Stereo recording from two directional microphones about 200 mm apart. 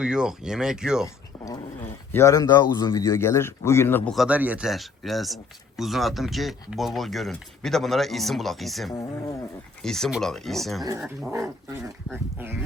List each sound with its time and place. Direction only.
0.0 s speech: 5° right (ahead or behind)
2.1 s speech: 15° left (ahead or behind)
4.1 s speech: 5° right (ahead or behind)
8.9 s speech: 15° left (ahead or behind)
9.8 s speech: centre (ahead or behind)
11.3 s speech: 15° right (ahead or behind)